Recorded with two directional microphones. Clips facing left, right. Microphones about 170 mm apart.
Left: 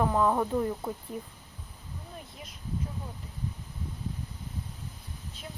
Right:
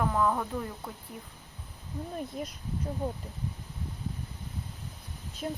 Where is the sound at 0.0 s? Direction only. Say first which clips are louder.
Left 2 dB; 25° left (ahead or behind).